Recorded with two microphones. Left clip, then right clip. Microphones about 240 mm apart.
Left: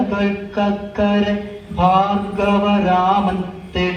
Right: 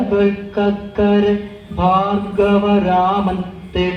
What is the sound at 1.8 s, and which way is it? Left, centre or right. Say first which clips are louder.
Mantra: left 1 dB; left.